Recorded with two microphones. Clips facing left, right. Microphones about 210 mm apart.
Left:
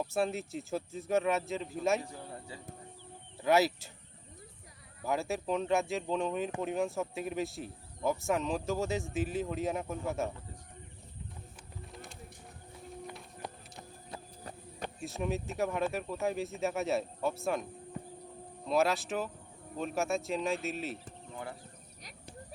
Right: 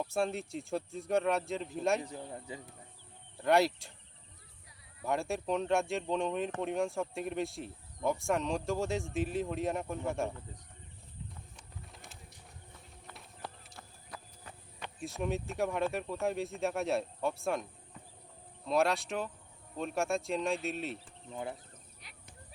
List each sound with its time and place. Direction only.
0.0 s speech: centre (ahead or behind)
2.0 s speech: 20° right (ahead or behind)
3.4 s speech: centre (ahead or behind)
5.0 s speech: centre (ahead or behind)
13.4 s clip-clop: 20° left (ahead or behind)
15.0 s speech: centre (ahead or behind)
18.7 s speech: centre (ahead or behind)